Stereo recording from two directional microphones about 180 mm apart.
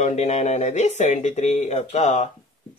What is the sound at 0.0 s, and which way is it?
Speech, 40° left (ahead or behind).